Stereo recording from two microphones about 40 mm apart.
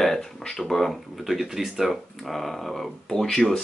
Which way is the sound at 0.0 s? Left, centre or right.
Centre.